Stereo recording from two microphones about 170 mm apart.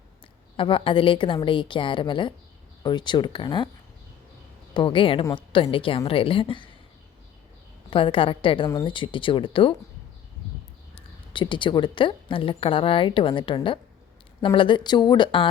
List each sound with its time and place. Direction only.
0.5 s a woman's voice: 30° left (ahead or behind)
4.7 s a woman's voice: 30° left (ahead or behind)
7.9 s a woman's voice: 30° left (ahead or behind)
10.9 s a woman's voice: 30° left (ahead or behind)